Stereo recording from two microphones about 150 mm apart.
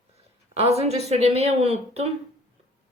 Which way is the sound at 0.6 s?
45° right (ahead or behind).